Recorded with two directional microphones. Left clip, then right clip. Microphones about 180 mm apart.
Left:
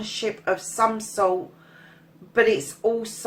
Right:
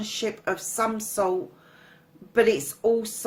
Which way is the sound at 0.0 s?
45° right (ahead or behind).